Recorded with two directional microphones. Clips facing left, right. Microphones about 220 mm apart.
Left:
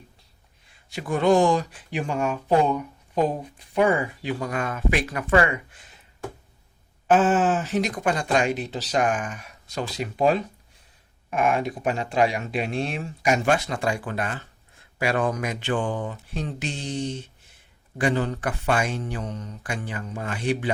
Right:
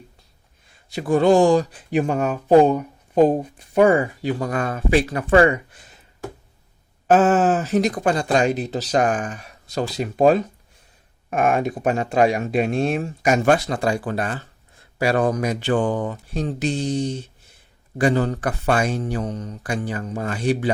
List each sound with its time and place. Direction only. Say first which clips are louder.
0.9 s speech: right 4 dB; 35° right (ahead or behind)
7.1 s speech: right 4 dB; 40° right (ahead or behind)